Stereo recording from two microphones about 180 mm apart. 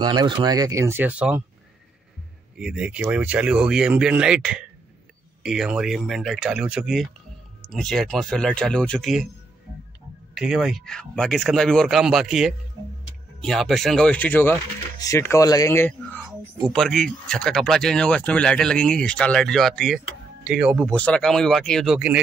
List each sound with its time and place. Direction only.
0.0 s speech: 20° right (ahead or behind)
2.6 s speech: 5° right (ahead or behind)
10.3 s speech: 5° right (ahead or behind)
20.8 s speech: 5° left (ahead or behind)